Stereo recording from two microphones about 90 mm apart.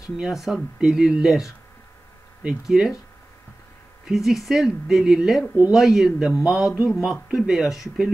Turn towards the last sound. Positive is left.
turn(degrees=-5)  # may be behind; listen again after turning